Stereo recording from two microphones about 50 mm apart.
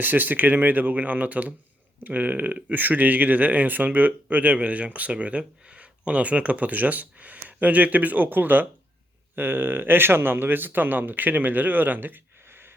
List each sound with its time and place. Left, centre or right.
0.0 s speech: right